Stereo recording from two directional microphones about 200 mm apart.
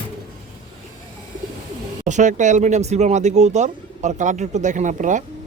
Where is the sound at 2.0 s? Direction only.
35° right (ahead or behind).